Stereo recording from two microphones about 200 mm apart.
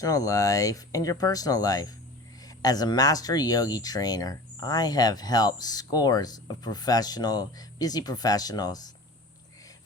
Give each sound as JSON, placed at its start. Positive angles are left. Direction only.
{"t": 0.0, "sound": "speech", "side_deg": 15}